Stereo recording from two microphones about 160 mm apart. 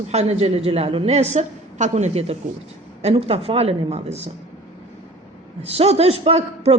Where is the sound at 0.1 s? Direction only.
40° right (ahead or behind).